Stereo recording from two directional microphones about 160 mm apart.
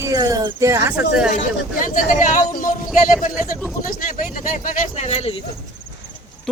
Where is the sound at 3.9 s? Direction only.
60° left (ahead or behind); by 5.3 s 40° left (ahead or behind).